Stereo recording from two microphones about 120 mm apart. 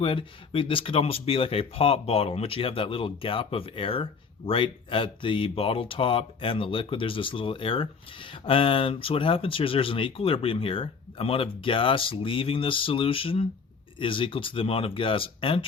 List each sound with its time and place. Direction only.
0.0 s speech: 50° left (ahead or behind)